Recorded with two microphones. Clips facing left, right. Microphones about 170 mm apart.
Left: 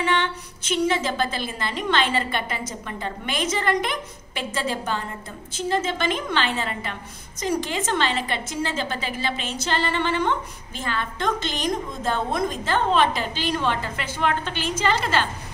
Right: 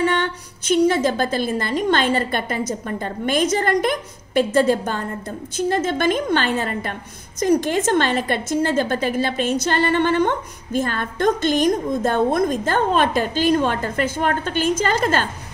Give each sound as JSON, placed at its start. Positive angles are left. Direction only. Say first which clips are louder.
{"t": 0.0, "sound": "a woman's voice", "louder": "right 4 dB", "side_deg": -40}